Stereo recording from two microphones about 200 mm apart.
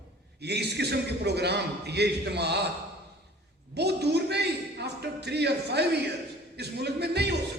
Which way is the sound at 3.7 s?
55° right (ahead or behind).